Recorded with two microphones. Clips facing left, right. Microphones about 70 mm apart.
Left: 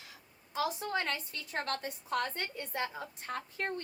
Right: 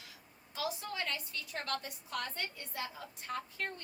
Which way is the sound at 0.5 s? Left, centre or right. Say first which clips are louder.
Left 6 dB; left.